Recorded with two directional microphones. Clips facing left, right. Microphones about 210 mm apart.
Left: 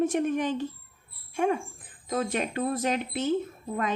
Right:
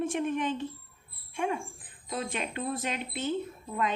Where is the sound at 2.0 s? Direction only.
45° left (ahead or behind).